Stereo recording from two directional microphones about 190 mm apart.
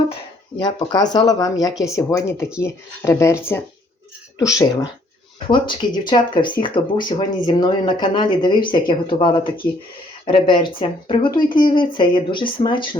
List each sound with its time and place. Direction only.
0.6 s speech: 20° left (ahead or behind)
4.4 s speech: 20° left (ahead or behind)